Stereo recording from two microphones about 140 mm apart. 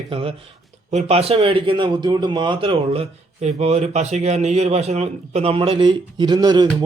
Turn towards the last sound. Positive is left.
turn(degrees=-30)  # may be behind; listen again after turning